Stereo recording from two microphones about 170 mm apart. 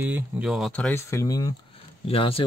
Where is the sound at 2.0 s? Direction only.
35° left (ahead or behind).